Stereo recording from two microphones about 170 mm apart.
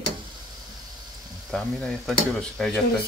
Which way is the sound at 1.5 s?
5° left (ahead or behind).